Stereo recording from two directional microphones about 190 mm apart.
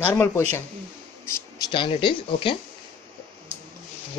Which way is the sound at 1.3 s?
15° left (ahead or behind).